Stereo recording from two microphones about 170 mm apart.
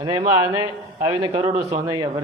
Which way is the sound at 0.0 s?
25° right (ahead or behind).